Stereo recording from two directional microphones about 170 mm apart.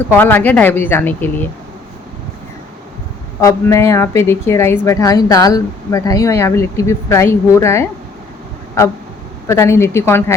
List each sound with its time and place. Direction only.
0.1 s a woman's voice: 10° left (ahead or behind)
3.4 s a woman's voice: 15° left (ahead or behind)
9.5 s a woman's voice: 15° left (ahead or behind)